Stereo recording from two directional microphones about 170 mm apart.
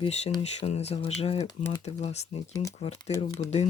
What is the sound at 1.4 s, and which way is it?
Speech, 25° left (ahead or behind).